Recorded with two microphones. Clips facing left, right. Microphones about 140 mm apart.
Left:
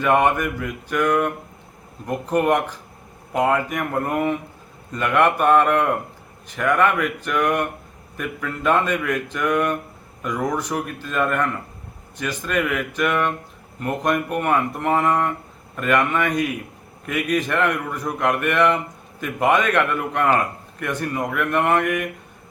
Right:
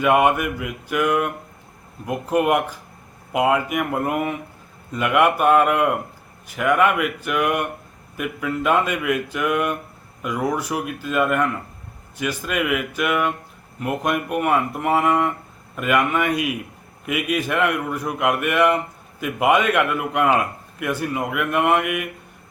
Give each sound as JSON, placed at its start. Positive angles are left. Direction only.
{"t": 0.0, "sound": "a man's voice", "side_deg": -10}